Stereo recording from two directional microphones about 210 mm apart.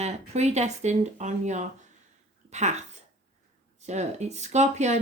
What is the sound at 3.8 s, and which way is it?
A woman's voice, 30° right (ahead or behind).